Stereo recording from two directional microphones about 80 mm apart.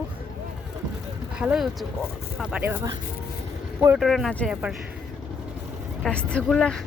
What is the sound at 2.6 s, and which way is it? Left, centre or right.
Speech, right.